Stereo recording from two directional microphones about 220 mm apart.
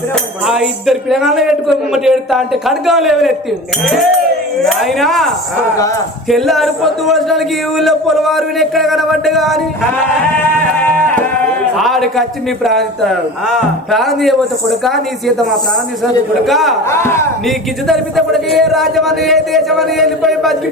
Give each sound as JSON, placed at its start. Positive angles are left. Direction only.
{"t": 0.4, "sound": "speech", "side_deg": 0}
{"t": 4.6, "sound": "speech", "side_deg": 0}
{"t": 10.9, "sound": "music", "side_deg": 5}
{"t": 11.8, "sound": "speech", "side_deg": 0}
{"t": 16.5, "sound": "speech", "side_deg": 0}
{"t": 16.9, "sound": "speech", "side_deg": 10}
{"t": 17.4, "sound": "speech", "side_deg": 0}